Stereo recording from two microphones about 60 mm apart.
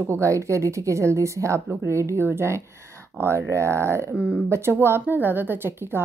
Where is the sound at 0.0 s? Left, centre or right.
Right.